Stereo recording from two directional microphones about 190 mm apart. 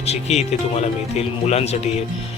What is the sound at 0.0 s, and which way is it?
Speech, 35° left (ahead or behind).